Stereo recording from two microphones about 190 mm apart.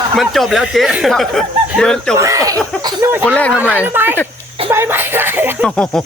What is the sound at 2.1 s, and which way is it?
Speech, 15° right (ahead or behind).